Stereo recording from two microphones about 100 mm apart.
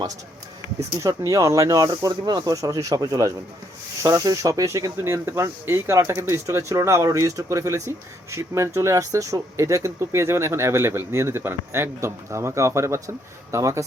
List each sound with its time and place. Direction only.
0.9 s speech: 35° right (ahead or behind)